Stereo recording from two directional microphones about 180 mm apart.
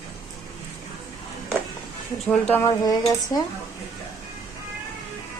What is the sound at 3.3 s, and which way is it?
Speech, 20° left (ahead or behind).